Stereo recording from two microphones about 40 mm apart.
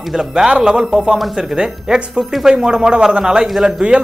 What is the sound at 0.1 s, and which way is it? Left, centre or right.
Speech, centre.